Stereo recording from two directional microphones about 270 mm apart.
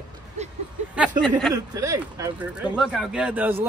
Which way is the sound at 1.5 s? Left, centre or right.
Centre.